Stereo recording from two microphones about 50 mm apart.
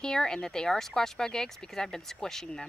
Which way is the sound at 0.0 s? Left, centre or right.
Centre.